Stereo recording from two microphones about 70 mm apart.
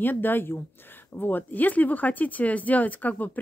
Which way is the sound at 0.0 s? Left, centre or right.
Left.